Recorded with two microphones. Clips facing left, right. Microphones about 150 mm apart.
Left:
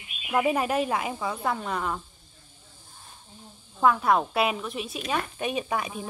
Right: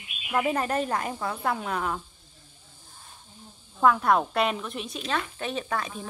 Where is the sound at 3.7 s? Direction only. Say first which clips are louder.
Even; centre (ahead or behind).